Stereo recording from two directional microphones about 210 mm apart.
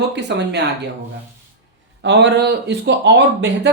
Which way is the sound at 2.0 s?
55° right (ahead or behind).